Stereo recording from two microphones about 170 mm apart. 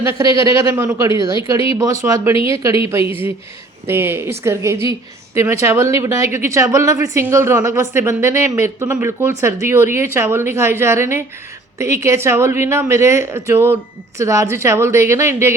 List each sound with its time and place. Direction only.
0.0 s a woman's voice: 15° right (ahead or behind)
3.0 s speech: 35° left (ahead or behind)
3.8 s a woman's voice: 15° right (ahead or behind)